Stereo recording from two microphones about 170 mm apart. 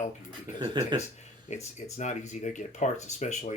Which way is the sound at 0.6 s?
25° right (ahead or behind).